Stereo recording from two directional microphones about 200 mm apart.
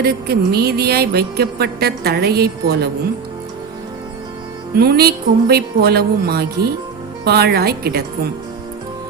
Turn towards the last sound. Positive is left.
turn(degrees=-50)  # may be behind; listen again after turning